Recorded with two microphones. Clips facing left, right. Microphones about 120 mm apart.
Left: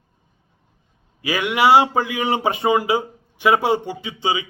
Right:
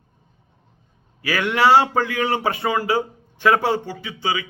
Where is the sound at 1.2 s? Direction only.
15° left (ahead or behind).